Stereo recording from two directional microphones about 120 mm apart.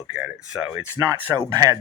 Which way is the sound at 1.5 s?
30° right (ahead or behind).